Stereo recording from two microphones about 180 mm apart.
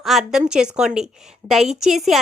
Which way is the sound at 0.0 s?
Centre (ahead or behind).